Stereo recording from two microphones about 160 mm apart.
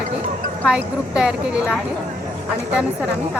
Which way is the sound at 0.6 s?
5° right (ahead or behind).